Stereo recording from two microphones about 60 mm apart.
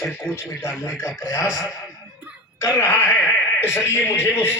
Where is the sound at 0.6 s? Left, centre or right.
Left.